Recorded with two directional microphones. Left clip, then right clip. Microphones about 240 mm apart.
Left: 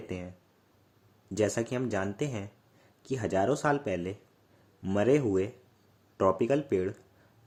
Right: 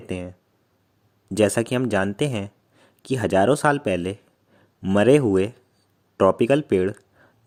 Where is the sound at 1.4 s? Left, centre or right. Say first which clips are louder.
Right 9 dB; right.